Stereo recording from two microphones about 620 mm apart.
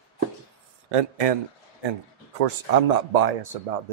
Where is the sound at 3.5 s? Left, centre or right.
Right.